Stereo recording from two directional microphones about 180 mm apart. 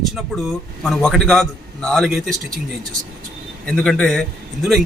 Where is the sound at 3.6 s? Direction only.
5° left (ahead or behind).